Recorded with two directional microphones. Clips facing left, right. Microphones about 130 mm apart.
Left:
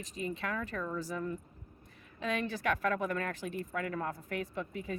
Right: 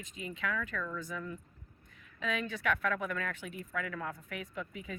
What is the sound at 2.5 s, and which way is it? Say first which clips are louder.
Speech: left 1 dB; 35° left (ahead or behind).